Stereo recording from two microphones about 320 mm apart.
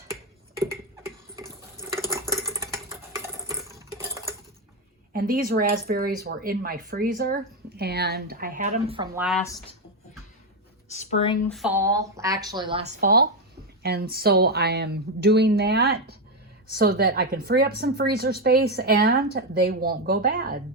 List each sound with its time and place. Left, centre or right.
1.8 s dishes: centre
2.3 s a sound: centre
5.1 s speech: right
9.1 s speech: centre
9.4 s speech: centre
10.8 s a sound: left
11.4 s speech: centre
12.8 s a woman's voice: right